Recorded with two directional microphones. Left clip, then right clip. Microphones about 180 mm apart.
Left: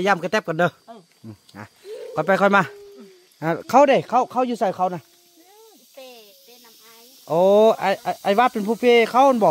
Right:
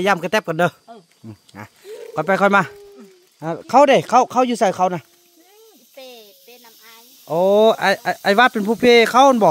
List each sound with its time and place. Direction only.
0.0 s speech: 15° right (ahead or behind)
1.2 s wild animals: 15° right (ahead or behind)
2.1 s speech: 10° right (ahead or behind)
3.3 s speech: 15° left (ahead or behind)
3.8 s speech: 20° right (ahead or behind)
7.2 s speech: centre (ahead or behind)
7.6 s speech: 20° right (ahead or behind)